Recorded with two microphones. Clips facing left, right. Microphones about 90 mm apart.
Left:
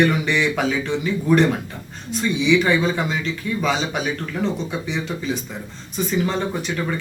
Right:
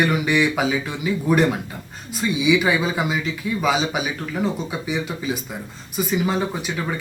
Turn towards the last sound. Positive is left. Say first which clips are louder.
# left 2 dB
turn(degrees=-5)  # may be behind; listen again after turning